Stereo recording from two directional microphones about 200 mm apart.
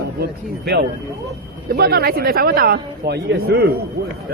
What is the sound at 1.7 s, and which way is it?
Speech, 50° right (ahead or behind).